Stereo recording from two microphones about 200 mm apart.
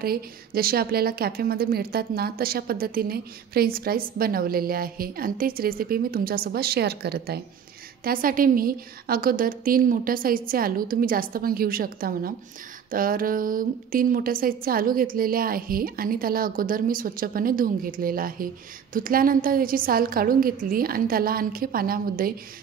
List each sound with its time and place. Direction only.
0.0 s a woman's voice: 50° right (ahead or behind)